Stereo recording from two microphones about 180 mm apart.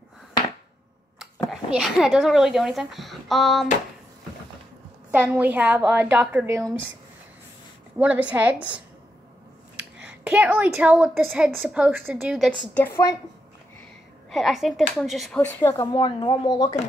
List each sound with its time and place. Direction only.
1.2 s speech: centre (ahead or behind)
5.1 s a woman's voice: 10° right (ahead or behind)
8.0 s a woman's voice: 5° right (ahead or behind); by 13.0 s 10° left (ahead or behind)
14.3 s speech: centre (ahead or behind)
15.6 s speech: 20° left (ahead or behind)